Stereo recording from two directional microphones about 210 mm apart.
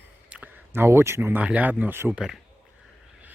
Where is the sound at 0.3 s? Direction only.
5° right (ahead or behind).